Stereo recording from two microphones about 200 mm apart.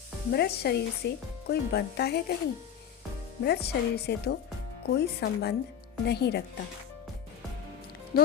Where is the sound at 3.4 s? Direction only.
55° left (ahead or behind).